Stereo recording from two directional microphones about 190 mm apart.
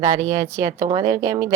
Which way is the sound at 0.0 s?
15° right (ahead or behind).